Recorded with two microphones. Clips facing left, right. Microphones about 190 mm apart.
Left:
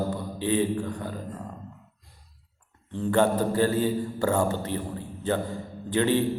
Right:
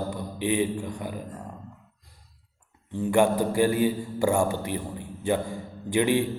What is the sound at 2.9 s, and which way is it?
A man's voice, 10° right (ahead or behind).